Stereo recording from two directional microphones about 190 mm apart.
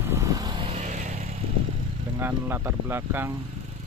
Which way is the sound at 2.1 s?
10° right (ahead or behind).